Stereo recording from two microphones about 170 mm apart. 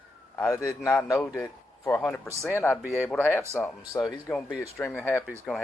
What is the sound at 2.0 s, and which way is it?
Speech, 5° left (ahead or behind).